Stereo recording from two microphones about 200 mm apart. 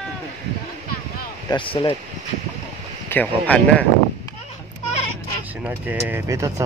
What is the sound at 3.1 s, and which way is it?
Speech, 5° left (ahead or behind).